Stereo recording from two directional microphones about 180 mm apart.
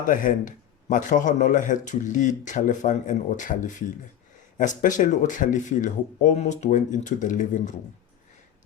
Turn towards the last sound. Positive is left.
turn(degrees=45)  # may be behind; listen again after turning